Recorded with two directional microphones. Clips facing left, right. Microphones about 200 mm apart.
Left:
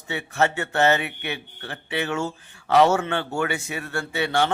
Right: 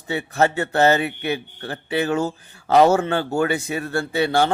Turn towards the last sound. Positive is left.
turn(degrees=-35)  # may be behind; listen again after turning